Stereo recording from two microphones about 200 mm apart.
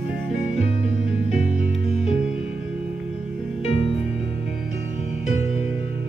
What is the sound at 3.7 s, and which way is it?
Music, 30° left (ahead or behind).